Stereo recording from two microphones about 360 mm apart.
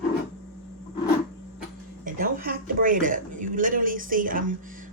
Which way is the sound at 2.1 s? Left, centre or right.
Right.